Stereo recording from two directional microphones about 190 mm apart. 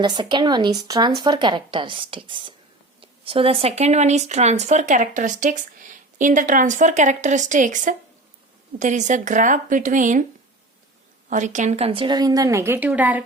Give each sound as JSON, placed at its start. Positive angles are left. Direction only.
{"t": 0.0, "sound": "speech", "side_deg": -25}
{"t": 11.3, "sound": "speech", "side_deg": -40}